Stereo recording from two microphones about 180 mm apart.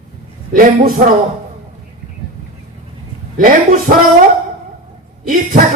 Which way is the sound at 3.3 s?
50° right (ahead or behind).